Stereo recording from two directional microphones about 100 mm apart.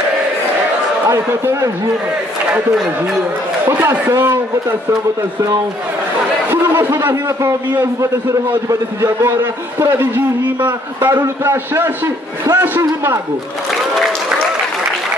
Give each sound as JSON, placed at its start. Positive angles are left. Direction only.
{"t": 1.0, "sound": "a man's voice", "side_deg": -30}
{"t": 3.6, "sound": "a man's voice", "side_deg": -25}
{"t": 6.5, "sound": "a man's voice", "side_deg": -25}